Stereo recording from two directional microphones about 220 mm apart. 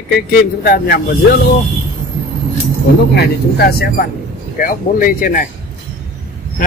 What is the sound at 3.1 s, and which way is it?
Speech, 45° left (ahead or behind).